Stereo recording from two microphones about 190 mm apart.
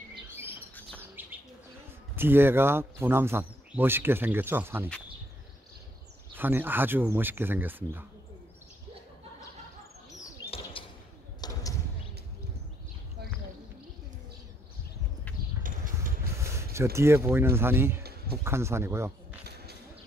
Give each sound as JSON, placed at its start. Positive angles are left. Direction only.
{"t": 0.3, "sound": "bird", "side_deg": -10}
{"t": 2.1, "sound": "speech", "side_deg": -10}
{"t": 6.3, "sound": "speech", "side_deg": -10}
{"t": 10.5, "sound": "bird", "side_deg": 30}
{"t": 11.4, "sound": "a sound", "side_deg": 20}
{"t": 16.0, "sound": "vehicle", "side_deg": -15}
{"t": 16.7, "sound": "speech", "side_deg": -15}